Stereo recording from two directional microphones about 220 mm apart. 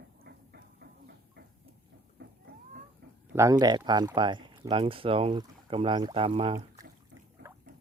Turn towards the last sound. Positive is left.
turn(degrees=-25)  # may be behind; listen again after turning